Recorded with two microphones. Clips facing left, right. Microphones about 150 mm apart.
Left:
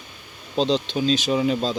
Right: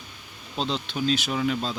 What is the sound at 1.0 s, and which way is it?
Speech, 25° left (ahead or behind).